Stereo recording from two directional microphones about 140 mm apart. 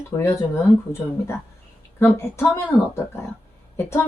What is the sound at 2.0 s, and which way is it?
Speech, 20° left (ahead or behind).